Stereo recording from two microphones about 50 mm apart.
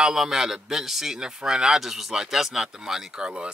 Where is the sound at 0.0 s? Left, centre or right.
Centre.